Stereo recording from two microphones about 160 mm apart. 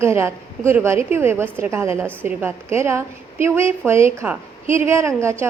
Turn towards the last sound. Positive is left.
turn(degrees=-15)  # may be behind; listen again after turning